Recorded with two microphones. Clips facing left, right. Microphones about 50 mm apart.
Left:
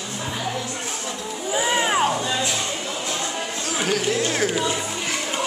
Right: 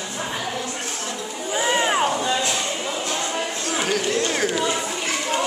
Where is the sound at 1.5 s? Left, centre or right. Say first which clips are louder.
Even; centre.